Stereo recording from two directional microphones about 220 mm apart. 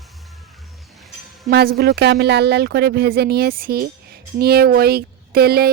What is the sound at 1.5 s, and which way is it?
Speech, 45° right (ahead or behind).